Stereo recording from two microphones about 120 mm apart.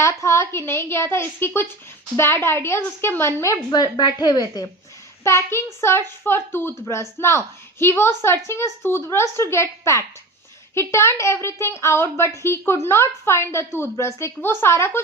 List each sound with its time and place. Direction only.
0.0 s speech: 25° left (ahead or behind)
5.2 s speech: 20° left (ahead or behind)